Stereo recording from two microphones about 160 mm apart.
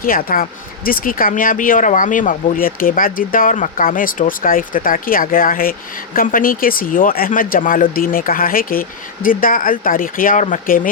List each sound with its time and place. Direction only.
0.0 s speech: 60° left (ahead or behind)